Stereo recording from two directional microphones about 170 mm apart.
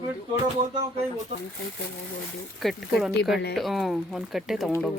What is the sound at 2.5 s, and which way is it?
Speech, centre (ahead or behind).